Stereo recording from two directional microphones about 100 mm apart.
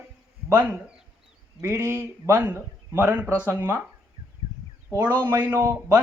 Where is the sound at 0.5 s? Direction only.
15° right (ahead or behind).